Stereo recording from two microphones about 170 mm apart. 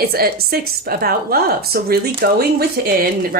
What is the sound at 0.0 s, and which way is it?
A woman's voice, 65° right (ahead or behind).